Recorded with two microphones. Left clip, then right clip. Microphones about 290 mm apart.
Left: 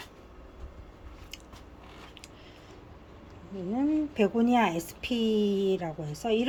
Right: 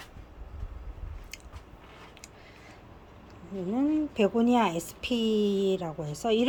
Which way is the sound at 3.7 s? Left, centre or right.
Centre.